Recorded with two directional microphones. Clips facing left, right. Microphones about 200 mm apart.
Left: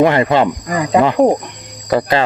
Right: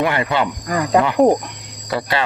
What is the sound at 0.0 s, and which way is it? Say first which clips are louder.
Speech: left 7 dB; 35° left (ahead or behind).